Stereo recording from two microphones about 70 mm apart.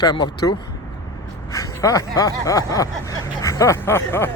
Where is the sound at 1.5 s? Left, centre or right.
Left.